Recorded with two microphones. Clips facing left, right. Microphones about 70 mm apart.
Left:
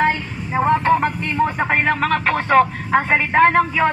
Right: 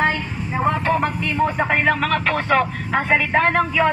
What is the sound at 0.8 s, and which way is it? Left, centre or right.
Speech, left.